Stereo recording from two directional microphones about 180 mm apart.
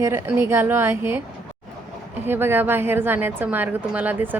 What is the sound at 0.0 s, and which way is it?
A woman's voice, 15° right (ahead or behind).